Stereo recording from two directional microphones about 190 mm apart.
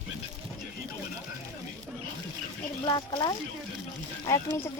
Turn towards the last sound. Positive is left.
turn(degrees=15)  # may be behind; listen again after turning